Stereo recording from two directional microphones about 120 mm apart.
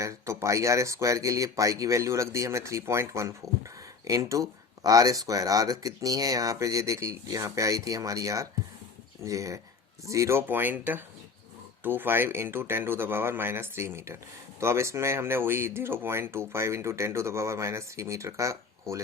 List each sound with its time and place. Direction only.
0.0 s speech: 25° right (ahead or behind)